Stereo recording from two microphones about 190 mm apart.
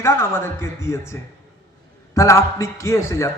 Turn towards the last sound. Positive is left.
turn(degrees=15)  # may be behind; listen again after turning